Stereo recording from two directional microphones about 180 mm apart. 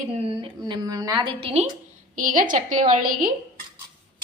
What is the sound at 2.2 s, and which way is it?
A woman's voice, 50° right (ahead or behind).